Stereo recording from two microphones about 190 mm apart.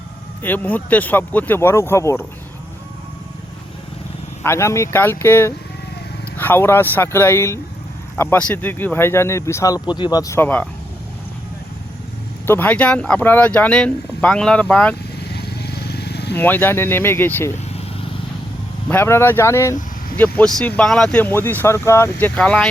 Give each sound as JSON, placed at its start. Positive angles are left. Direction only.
{"t": 0.4, "sound": "speech", "side_deg": 10}
{"t": 4.4, "sound": "speech", "side_deg": 15}
{"t": 12.5, "sound": "speech", "side_deg": 10}
{"t": 15.3, "sound": "vehicle", "side_deg": 60}
{"t": 16.4, "sound": "speech", "side_deg": 10}
{"t": 18.9, "sound": "speech", "side_deg": 10}